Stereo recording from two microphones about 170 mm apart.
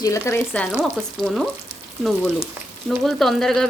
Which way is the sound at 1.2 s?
Centre (ahead or behind).